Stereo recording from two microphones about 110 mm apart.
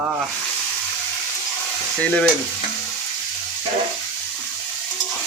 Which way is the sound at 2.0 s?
10° left (ahead or behind).